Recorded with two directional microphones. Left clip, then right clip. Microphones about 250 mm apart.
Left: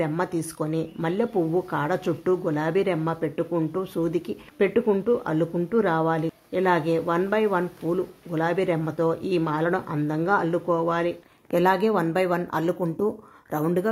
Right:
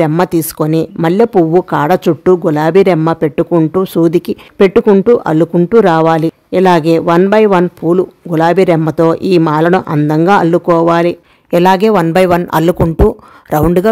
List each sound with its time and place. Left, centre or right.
0.0 s speech: right